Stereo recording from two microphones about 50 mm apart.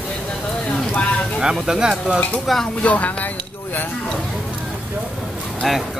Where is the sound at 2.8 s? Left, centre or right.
Left.